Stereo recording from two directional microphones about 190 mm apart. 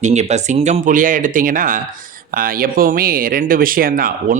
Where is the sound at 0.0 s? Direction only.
35° right (ahead or behind).